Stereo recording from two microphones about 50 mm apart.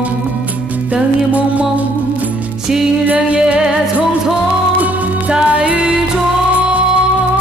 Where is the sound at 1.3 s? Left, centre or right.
Right.